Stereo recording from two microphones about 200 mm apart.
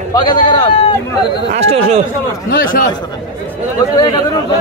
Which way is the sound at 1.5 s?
30° right (ahead or behind).